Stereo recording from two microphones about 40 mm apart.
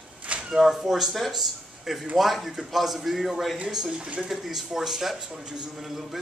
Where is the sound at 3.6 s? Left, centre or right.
Centre.